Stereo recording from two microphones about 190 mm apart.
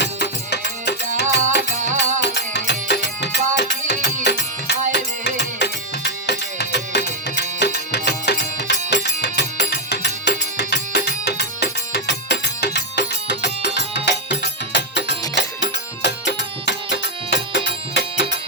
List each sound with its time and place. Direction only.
0.0 s music: 60° left (ahead or behind)